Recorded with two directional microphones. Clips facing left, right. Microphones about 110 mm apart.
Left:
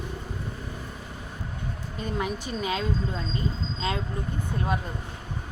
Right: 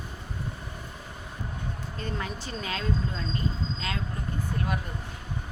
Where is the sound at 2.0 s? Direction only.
15° left (ahead or behind).